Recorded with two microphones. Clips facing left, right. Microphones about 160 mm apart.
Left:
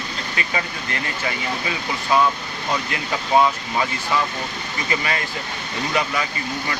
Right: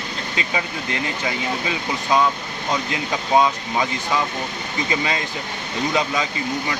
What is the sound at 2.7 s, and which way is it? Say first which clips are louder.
Speech: right 1 dB; 20° right (ahead or behind).